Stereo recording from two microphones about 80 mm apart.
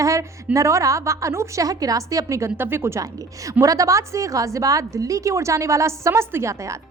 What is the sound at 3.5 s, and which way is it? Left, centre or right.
A woman's voice, right.